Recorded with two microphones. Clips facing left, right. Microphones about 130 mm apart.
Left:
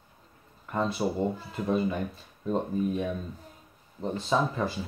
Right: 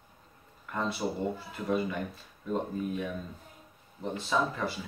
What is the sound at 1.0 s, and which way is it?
Speech, 15° left (ahead or behind).